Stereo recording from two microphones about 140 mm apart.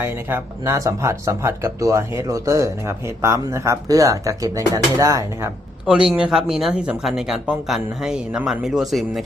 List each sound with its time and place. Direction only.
0.0 s speech: 15° right (ahead or behind)
5.8 s speech: 5° right (ahead or behind)